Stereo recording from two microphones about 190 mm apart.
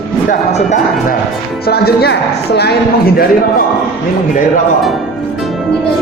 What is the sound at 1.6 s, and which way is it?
Speech, 55° left (ahead or behind).